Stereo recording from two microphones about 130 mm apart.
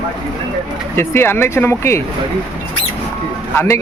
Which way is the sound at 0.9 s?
20° left (ahead or behind).